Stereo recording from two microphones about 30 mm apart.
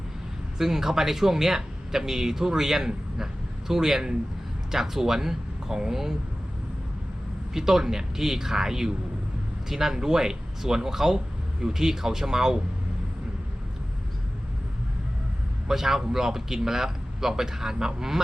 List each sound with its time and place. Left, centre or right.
0.6 s speech: centre
7.5 s speech: centre
15.6 s speech: centre